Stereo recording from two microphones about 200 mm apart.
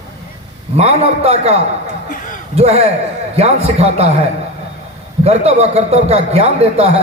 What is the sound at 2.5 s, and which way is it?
A man's voice, 30° right (ahead or behind).